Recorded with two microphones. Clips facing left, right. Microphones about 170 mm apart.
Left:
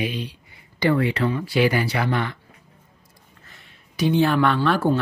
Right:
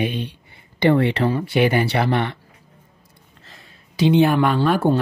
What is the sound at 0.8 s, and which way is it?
Speech, 25° right (ahead or behind).